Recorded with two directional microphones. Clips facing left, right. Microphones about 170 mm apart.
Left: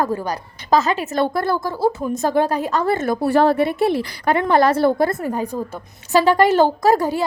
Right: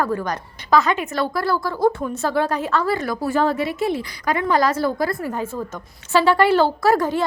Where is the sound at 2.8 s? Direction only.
45° left (ahead or behind).